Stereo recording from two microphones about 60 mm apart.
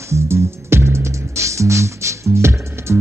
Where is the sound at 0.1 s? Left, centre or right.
Right.